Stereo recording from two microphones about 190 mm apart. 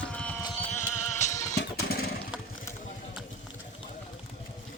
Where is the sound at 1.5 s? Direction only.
55° left (ahead or behind).